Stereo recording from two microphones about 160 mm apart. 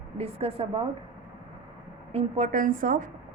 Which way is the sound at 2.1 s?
40° right (ahead or behind).